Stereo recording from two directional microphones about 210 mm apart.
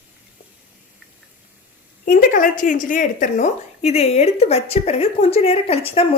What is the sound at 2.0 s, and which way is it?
A woman's voice, 40° left (ahead or behind).